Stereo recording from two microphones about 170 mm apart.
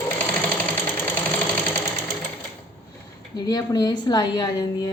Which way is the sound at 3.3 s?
25° left (ahead or behind).